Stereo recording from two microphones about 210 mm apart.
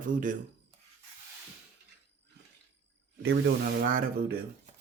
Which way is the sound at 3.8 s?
45° right (ahead or behind).